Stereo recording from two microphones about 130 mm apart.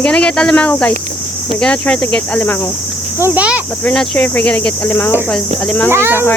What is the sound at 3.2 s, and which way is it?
Insect, 15° right (ahead or behind).